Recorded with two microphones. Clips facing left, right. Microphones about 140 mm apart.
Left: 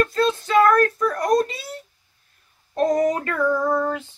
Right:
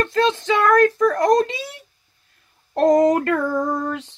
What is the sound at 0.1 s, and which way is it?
A child's voice, 90° right.